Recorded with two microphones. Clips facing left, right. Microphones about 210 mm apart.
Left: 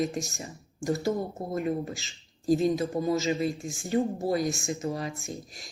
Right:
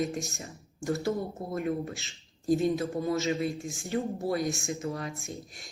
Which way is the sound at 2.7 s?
15° left (ahead or behind).